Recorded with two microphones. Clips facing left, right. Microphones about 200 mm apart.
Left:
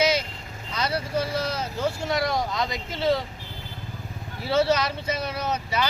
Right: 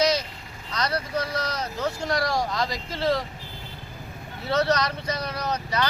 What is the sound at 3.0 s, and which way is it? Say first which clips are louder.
Speech: left 1 dB; centre (ahead or behind).